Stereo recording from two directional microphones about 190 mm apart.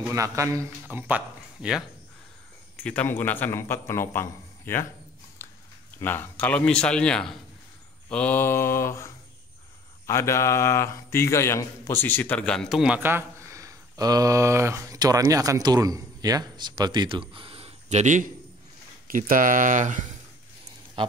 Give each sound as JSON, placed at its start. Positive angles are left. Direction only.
{"t": 0.1, "sound": "speech", "side_deg": -15}
{"t": 2.8, "sound": "a man's voice", "side_deg": 5}
{"t": 5.9, "sound": "a man's voice", "side_deg": 10}